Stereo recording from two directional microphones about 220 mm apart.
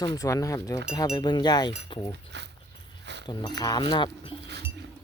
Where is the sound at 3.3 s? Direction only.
20° left (ahead or behind).